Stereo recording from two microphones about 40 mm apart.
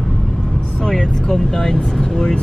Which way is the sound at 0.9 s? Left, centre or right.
Centre.